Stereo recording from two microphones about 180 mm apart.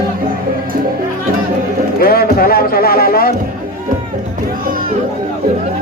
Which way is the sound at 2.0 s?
55° left (ahead or behind).